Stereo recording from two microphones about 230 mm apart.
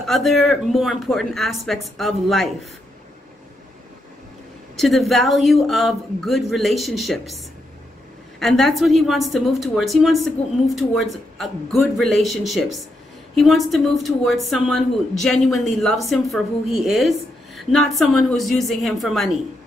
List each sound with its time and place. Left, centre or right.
0.0 s speech: centre
4.7 s speech: centre
8.4 s speech: centre